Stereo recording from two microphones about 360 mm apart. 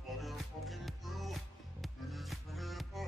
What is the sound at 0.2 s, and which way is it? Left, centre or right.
Music, centre.